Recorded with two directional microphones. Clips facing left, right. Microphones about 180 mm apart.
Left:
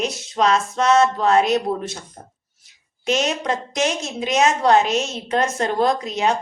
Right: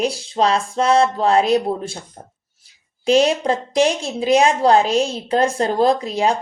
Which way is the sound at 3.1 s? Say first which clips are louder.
Right 6 dB; 30° right (ahead or behind).